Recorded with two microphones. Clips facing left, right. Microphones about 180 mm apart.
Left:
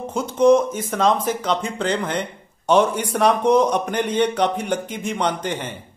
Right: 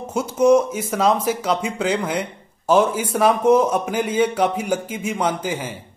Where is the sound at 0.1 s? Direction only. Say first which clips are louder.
Even; 5° right (ahead or behind).